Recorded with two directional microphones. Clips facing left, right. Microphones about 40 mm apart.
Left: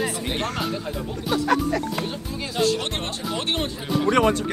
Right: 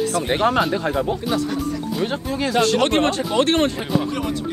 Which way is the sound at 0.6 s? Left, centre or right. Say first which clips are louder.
Right 8 dB; right.